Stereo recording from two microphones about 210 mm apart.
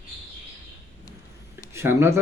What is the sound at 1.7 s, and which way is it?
Speech, 10° right (ahead or behind).